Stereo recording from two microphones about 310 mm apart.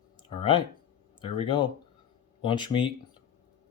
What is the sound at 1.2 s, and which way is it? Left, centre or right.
Speech, centre.